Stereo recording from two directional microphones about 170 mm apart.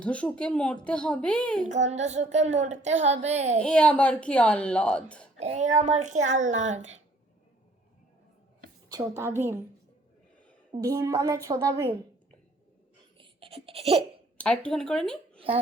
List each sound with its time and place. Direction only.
0.0 s speech: 5° left (ahead or behind)
1.6 s child singing: 45° right (ahead or behind)
3.6 s speech: 5° left (ahead or behind)
5.4 s a child's voice: 40° right (ahead or behind)
8.9 s a woman's voice: 20° right (ahead or behind)
10.7 s a woman's voice: 20° right (ahead or behind)
13.1 s laughter: 30° right (ahead or behind)
14.3 s speech: 5° left (ahead or behind)
15.4 s a child's voice: 35° right (ahead or behind)